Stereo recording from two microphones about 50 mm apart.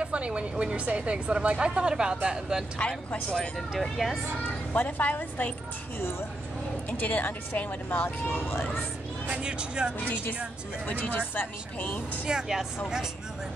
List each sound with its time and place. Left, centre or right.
0.0 s a woman's voice: right
2.8 s speech: left
3.8 s speech: centre
4.7 s speech: left
6.9 s speech: left
8.3 s speech: left
9.3 s a woman's voice: centre
10.9 s speech: left
12.3 s speech: centre